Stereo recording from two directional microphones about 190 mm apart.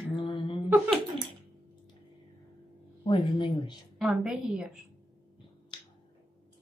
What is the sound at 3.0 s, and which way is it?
Speech, 25° left (ahead or behind).